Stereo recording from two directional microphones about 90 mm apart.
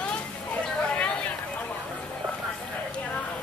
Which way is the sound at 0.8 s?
10° left (ahead or behind).